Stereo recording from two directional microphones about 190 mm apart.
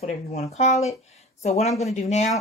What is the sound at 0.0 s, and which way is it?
Speech, 35° left (ahead or behind).